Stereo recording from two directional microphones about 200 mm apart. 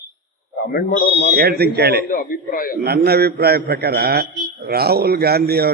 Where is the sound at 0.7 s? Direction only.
50° left (ahead or behind).